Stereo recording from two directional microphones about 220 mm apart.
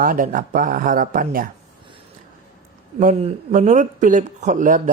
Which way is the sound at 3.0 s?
35° right (ahead or behind).